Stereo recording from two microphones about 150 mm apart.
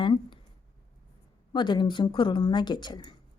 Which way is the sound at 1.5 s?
30° left (ahead or behind).